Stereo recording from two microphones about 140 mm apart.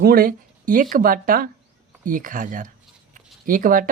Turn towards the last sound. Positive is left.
turn(degrees=-80)